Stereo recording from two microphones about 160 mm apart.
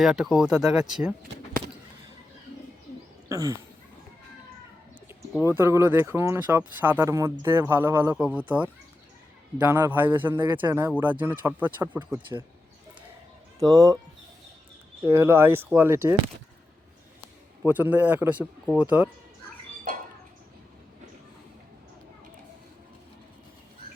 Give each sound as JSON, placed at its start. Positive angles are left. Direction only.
{"t": 0.0, "sound": "speech", "side_deg": -5}
{"t": 3.2, "sound": "a sound", "side_deg": -20}
{"t": 5.5, "sound": "speech", "side_deg": -15}
{"t": 13.6, "sound": "speech", "side_deg": -20}
{"t": 15.0, "sound": "speech", "side_deg": -15}
{"t": 17.6, "sound": "speech", "side_deg": -10}